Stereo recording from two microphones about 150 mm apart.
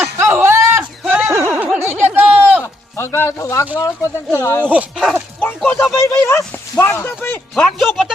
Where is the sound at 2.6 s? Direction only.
15° left (ahead or behind).